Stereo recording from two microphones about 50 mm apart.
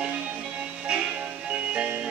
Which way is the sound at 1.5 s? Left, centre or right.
Right.